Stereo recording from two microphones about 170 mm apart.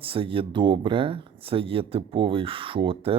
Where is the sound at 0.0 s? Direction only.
30° right (ahead or behind).